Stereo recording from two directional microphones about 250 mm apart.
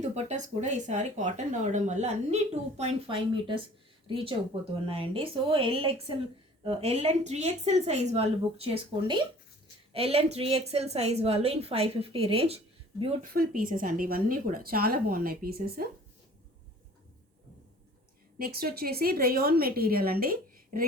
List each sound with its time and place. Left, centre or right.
0.0 s speech: right
13.3 s a woman's voice: right
18.3 s a woman's voice: right